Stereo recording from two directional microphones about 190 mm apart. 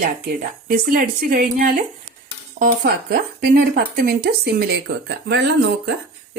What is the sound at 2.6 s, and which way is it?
Speech, 50° right (ahead or behind).